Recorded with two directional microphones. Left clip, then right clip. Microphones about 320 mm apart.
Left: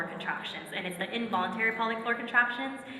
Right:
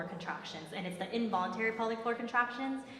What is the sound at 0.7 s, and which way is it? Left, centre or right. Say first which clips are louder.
A woman's voice: left 3 dB; right.